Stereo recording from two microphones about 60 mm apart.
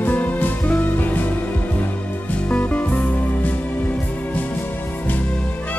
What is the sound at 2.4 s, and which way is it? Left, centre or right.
Music, left.